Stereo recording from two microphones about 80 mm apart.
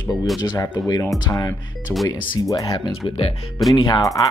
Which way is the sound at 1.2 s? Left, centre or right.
Left.